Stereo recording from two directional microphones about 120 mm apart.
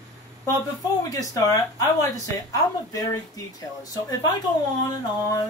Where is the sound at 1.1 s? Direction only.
30° left (ahead or behind).